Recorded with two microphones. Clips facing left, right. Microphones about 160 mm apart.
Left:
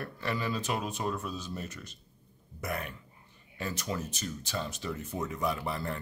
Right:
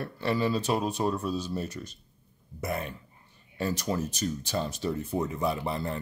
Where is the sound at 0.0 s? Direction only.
30° right (ahead or behind).